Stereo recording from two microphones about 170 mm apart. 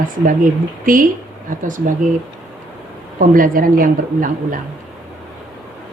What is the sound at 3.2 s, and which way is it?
Speech, 55° right (ahead or behind).